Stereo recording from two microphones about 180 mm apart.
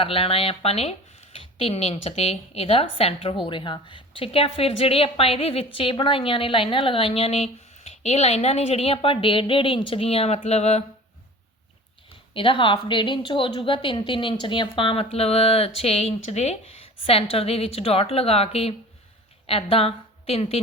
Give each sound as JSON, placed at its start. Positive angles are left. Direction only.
{"t": 0.0, "sound": "speech", "side_deg": 30}
{"t": 12.3, "sound": "a woman's voice", "side_deg": 30}